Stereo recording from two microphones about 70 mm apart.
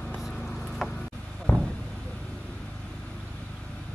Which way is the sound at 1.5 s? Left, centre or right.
Left.